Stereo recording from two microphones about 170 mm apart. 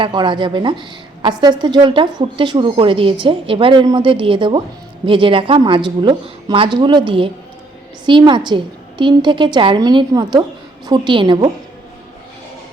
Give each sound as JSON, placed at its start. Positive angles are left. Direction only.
{"t": 0.0, "sound": "a woman's voice", "side_deg": -25}